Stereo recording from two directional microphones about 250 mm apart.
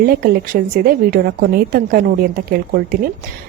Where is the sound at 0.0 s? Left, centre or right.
Right.